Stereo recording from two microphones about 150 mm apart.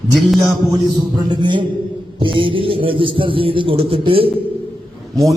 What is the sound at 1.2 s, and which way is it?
Speech, 30° right (ahead or behind).